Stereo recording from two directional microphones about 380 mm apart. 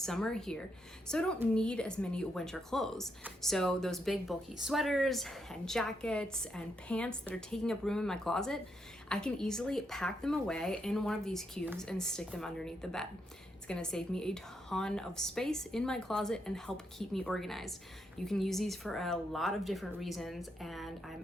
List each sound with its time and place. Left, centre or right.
0.0 s a woman's voice: centre